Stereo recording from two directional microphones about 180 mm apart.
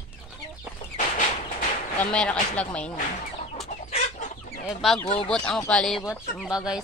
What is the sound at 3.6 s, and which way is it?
Chicken, 35° left (ahead or behind).